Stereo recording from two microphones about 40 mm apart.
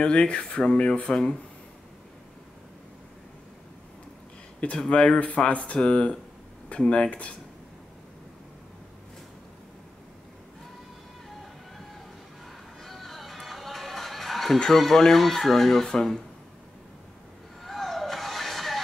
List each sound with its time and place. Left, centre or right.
0.0 s speech: left
4.7 s speech: left
5.2 s speech: left
12.8 s music: centre
14.7 s speech: centre
17.6 s music: centre